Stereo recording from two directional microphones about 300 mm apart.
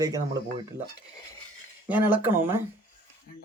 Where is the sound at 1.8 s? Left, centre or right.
Centre.